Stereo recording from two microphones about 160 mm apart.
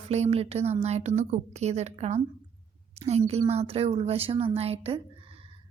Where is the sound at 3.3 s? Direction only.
40° right (ahead or behind).